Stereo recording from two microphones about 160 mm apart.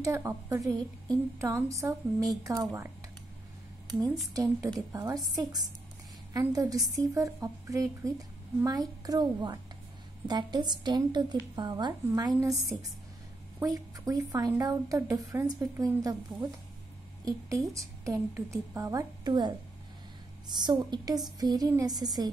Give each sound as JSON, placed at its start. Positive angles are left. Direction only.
{"t": 0.0, "sound": "a woman's voice", "side_deg": -20}
{"t": 4.3, "sound": "a woman's voice", "side_deg": -20}
{"t": 13.6, "sound": "a woman's voice", "side_deg": -20}